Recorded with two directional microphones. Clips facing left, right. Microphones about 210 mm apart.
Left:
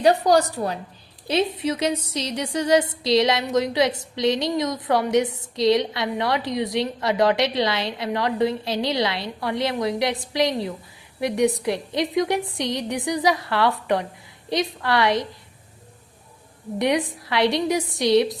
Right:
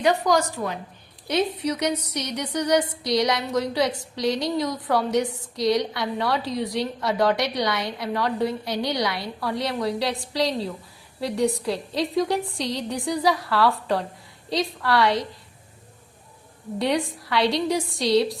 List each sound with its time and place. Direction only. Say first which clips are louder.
0.0 s a woman's voice: left 3 dB; 35° left (ahead or behind)
16.7 s a woman's voice: left 2 dB; 20° left (ahead or behind)